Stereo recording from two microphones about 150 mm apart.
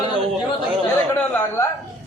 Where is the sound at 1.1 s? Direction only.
15° left (ahead or behind).